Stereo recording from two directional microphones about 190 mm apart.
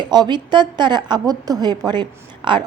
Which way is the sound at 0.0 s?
25° right (ahead or behind).